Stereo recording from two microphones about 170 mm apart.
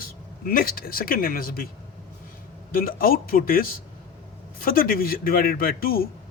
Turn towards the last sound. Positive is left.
turn(degrees=60)  # may be behind; listen again after turning